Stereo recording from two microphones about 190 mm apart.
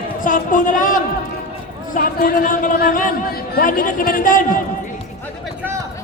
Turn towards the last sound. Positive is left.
turn(degrees=45)  # may be behind; listen again after turning